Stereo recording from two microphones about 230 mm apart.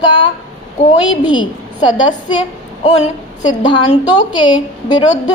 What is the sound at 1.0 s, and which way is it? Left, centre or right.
A woman's voice, left.